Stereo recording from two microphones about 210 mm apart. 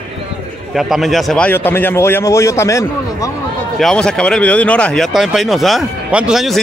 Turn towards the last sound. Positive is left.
turn(degrees=0)  # may be behind; listen again after turning